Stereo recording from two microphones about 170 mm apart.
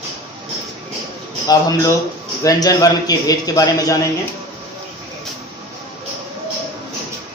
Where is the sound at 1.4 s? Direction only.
20° left (ahead or behind).